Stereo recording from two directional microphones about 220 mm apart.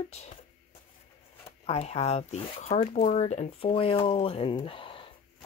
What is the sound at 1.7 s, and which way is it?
Speech, 30° left (ahead or behind).